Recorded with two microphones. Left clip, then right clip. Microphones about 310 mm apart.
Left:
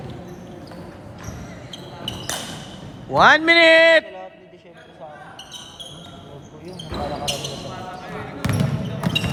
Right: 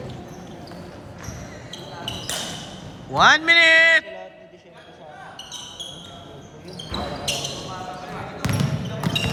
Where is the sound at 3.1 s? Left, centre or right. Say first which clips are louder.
Left 2 dB; centre.